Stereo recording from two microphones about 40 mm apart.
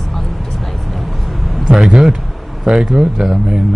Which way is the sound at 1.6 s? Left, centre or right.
Centre.